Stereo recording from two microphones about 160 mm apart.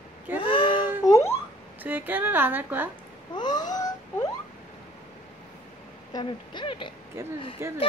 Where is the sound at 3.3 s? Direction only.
25° left (ahead or behind).